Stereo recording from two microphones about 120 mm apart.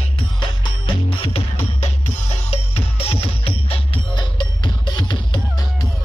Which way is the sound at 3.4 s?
55° left (ahead or behind).